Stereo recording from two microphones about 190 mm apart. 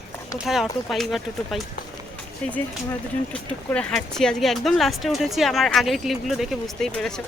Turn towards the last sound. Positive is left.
turn(degrees=5)  # may be behind; listen again after turning